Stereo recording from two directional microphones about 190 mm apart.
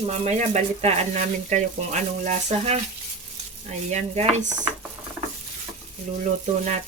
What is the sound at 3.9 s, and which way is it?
Speech, 40° right (ahead or behind).